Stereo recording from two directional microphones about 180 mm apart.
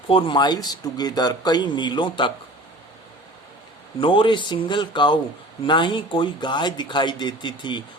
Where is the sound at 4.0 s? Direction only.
25° left (ahead or behind).